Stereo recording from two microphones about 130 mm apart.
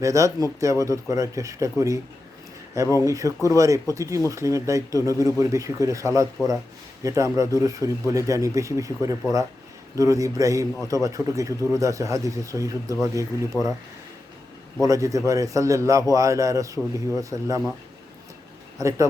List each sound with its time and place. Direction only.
0.0 s speech: 25° right (ahead or behind)
14.8 s speech: 25° right (ahead or behind)
18.8 s speech: 25° right (ahead or behind)